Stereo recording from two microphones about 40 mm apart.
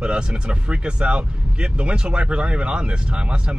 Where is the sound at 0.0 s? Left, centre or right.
Right.